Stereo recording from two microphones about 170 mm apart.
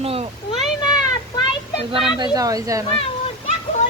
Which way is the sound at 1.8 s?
35° right (ahead or behind).